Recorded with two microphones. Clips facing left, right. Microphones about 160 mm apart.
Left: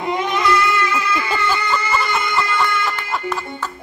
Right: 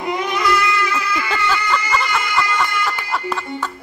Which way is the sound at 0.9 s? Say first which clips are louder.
Left 1 dB; 25° left (ahead or behind).